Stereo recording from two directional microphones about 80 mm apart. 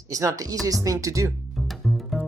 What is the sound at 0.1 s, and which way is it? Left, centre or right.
Speech, right.